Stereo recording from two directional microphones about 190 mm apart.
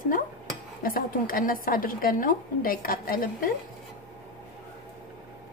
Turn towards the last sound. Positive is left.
turn(degrees=50)  # may be behind; listen again after turning